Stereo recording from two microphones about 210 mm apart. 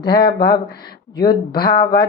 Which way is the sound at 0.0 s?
20° left (ahead or behind).